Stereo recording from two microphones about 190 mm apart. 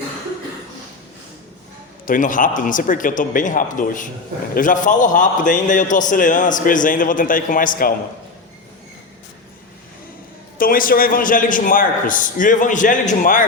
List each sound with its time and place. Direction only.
2.0 s a man's voice: 45° left (ahead or behind)
10.6 s a man's voice: 50° left (ahead or behind)